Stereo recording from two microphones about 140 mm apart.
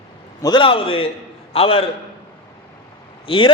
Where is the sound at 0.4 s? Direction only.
35° left (ahead or behind).